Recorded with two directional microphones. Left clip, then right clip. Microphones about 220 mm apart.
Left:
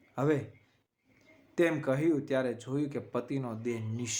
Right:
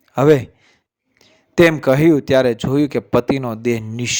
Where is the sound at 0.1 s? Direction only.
45° right (ahead or behind).